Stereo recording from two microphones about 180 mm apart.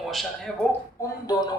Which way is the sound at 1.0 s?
20° left (ahead or behind).